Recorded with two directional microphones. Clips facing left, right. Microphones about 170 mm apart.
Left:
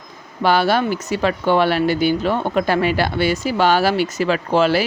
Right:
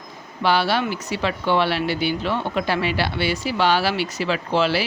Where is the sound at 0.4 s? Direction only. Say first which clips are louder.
Left 4 dB; 45° left (ahead or behind).